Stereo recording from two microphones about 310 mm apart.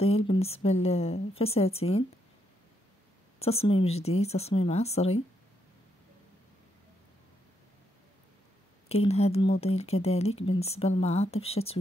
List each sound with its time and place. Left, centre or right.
0.0 s speech: centre
3.3 s speech: centre
8.8 s speech: centre